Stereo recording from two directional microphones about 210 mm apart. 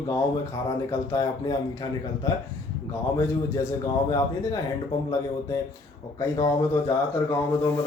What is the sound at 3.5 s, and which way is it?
A man's voice, 15° left (ahead or behind).